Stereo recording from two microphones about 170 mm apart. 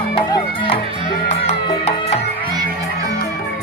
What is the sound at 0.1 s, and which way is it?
Speech, 25° left (ahead or behind).